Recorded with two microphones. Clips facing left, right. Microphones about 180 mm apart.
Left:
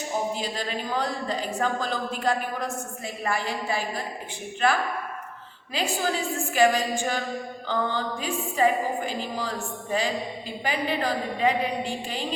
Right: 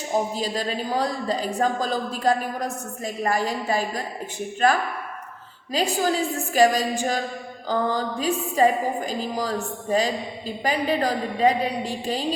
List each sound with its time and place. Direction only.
0.3 s a woman's voice: 35° right (ahead or behind)